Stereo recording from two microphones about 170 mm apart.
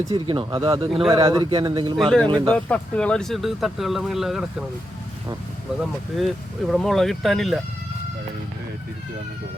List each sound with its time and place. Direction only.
0.1 s a man's voice: 30° right (ahead or behind)
2.5 s speech: 5° left (ahead or behind)
5.8 s speech: centre (ahead or behind)